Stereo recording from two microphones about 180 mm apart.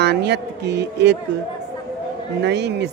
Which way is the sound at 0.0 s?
70° right (ahead or behind).